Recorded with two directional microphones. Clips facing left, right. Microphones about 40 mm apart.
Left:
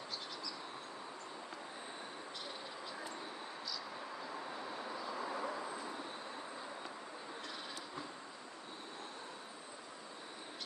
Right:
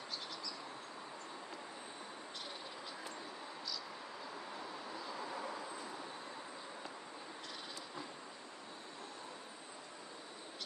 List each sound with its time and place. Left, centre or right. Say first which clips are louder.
5.2 s vehicle: left 3 dB; centre